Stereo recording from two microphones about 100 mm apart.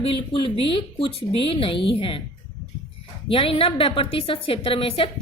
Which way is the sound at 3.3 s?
70° left (ahead or behind).